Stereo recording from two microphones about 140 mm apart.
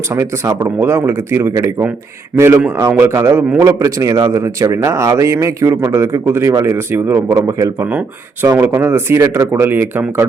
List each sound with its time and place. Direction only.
0.1 s speech: 20° right (ahead or behind)